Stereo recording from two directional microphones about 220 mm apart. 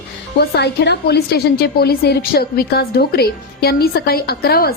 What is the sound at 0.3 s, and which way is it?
A woman's voice, 50° left (ahead or behind).